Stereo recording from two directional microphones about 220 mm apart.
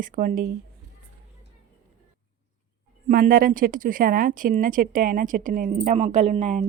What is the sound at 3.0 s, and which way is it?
A woman's voice, 40° right (ahead or behind).